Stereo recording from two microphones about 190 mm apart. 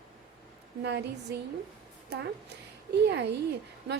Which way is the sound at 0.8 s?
65° right (ahead or behind).